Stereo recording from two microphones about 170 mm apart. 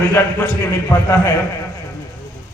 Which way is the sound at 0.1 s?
15° left (ahead or behind).